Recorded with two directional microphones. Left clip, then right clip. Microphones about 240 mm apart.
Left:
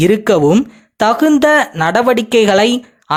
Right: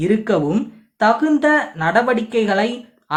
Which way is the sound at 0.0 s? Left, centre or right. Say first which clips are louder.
Left 7 dB; left.